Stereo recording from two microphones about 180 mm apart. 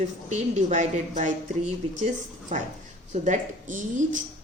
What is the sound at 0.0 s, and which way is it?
A woman's voice, 40° right (ahead or behind).